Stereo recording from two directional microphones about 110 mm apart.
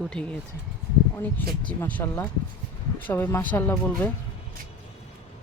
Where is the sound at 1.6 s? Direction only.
15° left (ahead or behind).